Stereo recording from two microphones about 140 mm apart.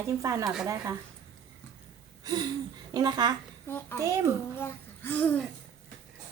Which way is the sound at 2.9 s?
30° right (ahead or behind).